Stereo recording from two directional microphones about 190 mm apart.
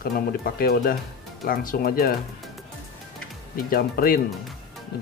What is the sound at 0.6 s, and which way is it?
Speech, 50° left (ahead or behind).